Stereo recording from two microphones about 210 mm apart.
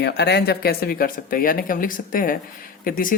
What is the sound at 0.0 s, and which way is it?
Speech, 55° left (ahead or behind).